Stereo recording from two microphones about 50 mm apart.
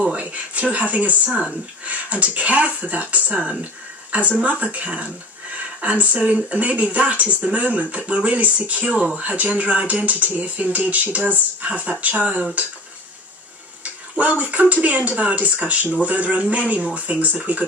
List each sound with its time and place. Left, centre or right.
0.1 s speech: right
1.3 s speech: centre
1.9 s speech: right
13.8 s speech: right